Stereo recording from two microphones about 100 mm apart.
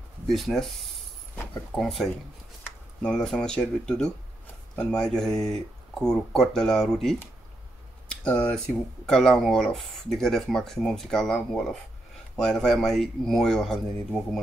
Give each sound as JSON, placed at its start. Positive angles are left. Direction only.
{"t": 0.3, "sound": "speech", "side_deg": 0}
{"t": 1.8, "sound": "speech", "side_deg": 0}
{"t": 8.2, "sound": "speech", "side_deg": 10}